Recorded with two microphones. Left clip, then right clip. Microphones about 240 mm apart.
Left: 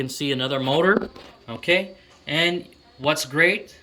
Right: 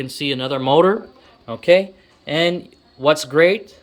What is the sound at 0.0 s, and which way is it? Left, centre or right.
Speech, centre.